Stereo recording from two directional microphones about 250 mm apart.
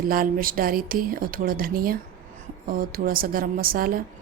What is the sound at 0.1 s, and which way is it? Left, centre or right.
A woman's voice, right.